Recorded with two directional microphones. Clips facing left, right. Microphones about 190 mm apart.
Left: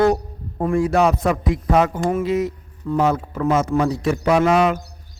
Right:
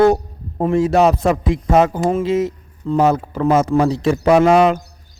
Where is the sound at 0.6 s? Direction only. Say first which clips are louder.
Right 3 dB; 25° right (ahead or behind).